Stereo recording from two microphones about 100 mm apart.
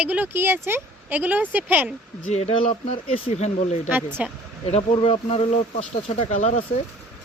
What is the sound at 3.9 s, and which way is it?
Speech, 20° right (ahead or behind).